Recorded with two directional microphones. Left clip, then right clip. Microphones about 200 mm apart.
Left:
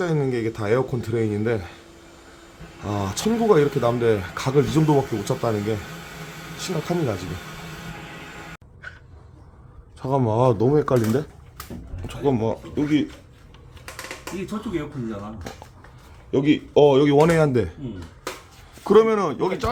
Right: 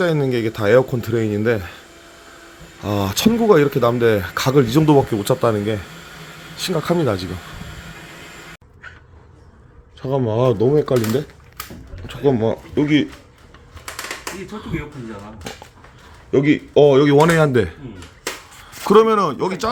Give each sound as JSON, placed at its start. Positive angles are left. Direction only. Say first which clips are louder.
{"t": 0.0, "sound": "speech", "louder": "right 5 dB", "side_deg": -25}
{"t": 2.8, "sound": "speech", "louder": "right 6 dB", "side_deg": -25}
{"t": 10.0, "sound": "speech", "louder": "right 2 dB", "side_deg": 0}
{"t": 12.0, "sound": "speech", "louder": "right 5 dB", "side_deg": -15}
{"t": 16.3, "sound": "speech", "louder": "right 4 dB", "side_deg": -20}
{"t": 18.9, "sound": "speech", "louder": "right 4 dB", "side_deg": -20}